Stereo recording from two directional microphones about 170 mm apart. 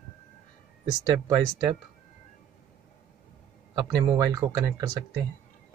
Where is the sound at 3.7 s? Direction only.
25° right (ahead or behind).